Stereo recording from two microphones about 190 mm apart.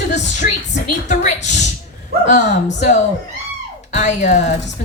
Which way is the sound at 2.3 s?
40° left (ahead or behind).